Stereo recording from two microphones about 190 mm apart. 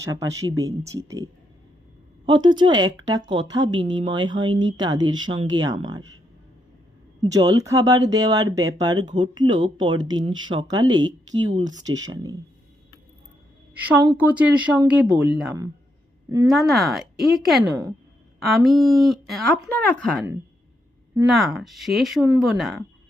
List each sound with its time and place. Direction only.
0.0 s speech: 15° right (ahead or behind)
7.2 s speech: 20° right (ahead or behind)
14.2 s speech: 10° right (ahead or behind)
16.5 s speech: centre (ahead or behind)
21.2 s speech: centre (ahead or behind)
22.5 s speech: centre (ahead or behind)